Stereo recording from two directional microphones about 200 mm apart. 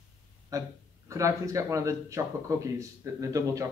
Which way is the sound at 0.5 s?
15° right (ahead or behind).